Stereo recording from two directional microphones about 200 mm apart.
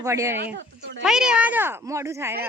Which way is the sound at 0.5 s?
60° right (ahead or behind).